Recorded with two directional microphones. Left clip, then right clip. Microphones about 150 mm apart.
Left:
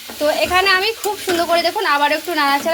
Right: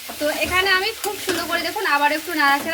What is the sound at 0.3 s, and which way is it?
Speech, 55° left (ahead or behind).